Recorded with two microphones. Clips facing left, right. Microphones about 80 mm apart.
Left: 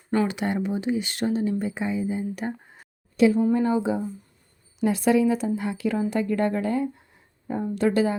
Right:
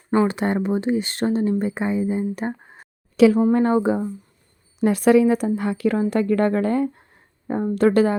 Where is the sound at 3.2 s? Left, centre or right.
Right.